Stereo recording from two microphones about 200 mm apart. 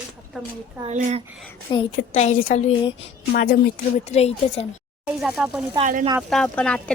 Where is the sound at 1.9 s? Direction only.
35° left (ahead or behind).